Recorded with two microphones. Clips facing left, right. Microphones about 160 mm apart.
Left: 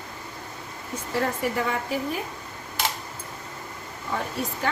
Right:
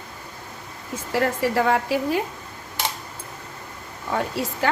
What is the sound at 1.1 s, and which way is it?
Speech, 90° right.